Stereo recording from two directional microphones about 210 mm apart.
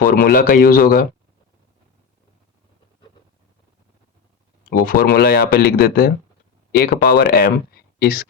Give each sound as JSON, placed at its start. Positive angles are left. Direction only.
{"t": 0.1, "sound": "speech", "side_deg": 40}
{"t": 4.8, "sound": "speech", "side_deg": 45}